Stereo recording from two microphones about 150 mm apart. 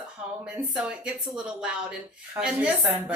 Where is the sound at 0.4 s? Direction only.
5° right (ahead or behind).